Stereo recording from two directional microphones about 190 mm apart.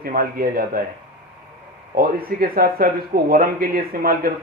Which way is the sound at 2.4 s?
50° right (ahead or behind).